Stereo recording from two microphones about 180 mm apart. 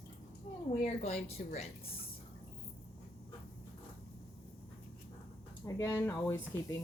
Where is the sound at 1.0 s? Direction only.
40° left (ahead or behind).